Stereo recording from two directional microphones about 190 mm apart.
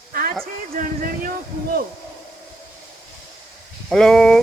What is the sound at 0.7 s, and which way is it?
Speech, 50° right (ahead or behind).